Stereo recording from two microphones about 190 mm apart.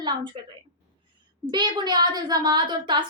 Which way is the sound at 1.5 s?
25° right (ahead or behind).